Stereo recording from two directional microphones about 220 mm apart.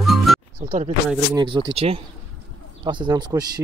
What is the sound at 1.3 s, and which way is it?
Speech, 20° right (ahead or behind).